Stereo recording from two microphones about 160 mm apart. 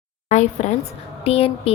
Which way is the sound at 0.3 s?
45° left (ahead or behind).